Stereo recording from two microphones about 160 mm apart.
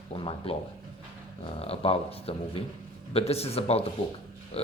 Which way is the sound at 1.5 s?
40° left (ahead or behind).